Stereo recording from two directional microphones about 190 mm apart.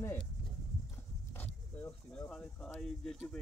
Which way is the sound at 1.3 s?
10° left (ahead or behind).